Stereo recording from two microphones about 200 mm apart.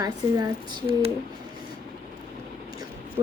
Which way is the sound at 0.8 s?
25° right (ahead or behind).